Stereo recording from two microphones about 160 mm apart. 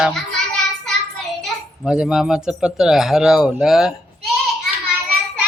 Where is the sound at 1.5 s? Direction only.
Centre (ahead or behind).